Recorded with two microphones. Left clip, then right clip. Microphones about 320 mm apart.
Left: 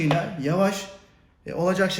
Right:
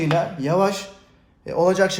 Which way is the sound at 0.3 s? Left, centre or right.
Right.